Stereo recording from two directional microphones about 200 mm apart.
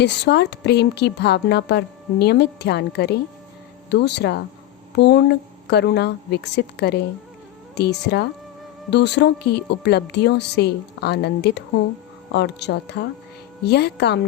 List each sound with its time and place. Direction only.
0.0 s a woman's voice: 60° left (ahead or behind)